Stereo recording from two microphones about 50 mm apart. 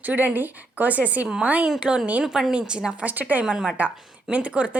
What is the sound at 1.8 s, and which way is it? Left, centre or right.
Speech, centre.